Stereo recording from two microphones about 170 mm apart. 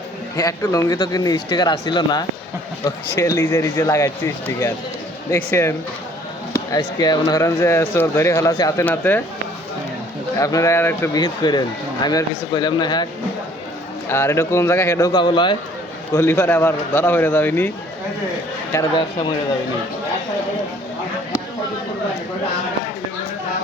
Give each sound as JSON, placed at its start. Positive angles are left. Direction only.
{"t": 0.3, "sound": "speech", "side_deg": 20}
{"t": 10.4, "sound": "speech", "side_deg": 20}
{"t": 14.1, "sound": "speech", "side_deg": 15}
{"t": 16.1, "sound": "speech", "side_deg": 15}